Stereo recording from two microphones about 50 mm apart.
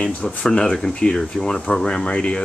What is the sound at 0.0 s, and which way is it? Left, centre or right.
Speech, left.